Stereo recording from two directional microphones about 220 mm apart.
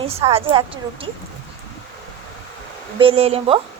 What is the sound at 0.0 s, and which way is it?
Speech, 25° right (ahead or behind).